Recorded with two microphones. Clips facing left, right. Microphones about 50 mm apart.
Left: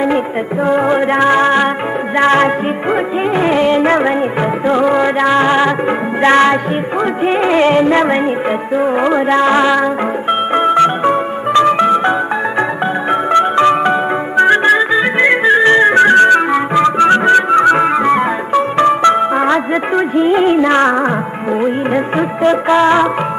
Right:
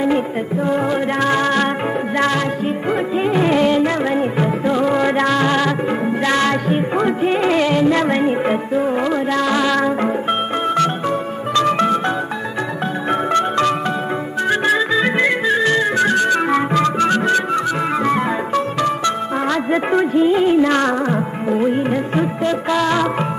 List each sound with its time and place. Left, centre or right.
0.7 s music of bollywood: left
2.1 s music: left
3.3 s music: left
3.8 s music: left
7.2 s music of bollywood: left
10.6 s music: left
13.1 s music: left
14.7 s music: centre
15.2 s music: left
16.5 s music: left
18.0 s music: left
20.2 s music of bollywood: left